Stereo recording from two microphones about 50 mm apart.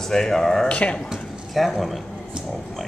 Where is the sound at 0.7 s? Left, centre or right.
Left.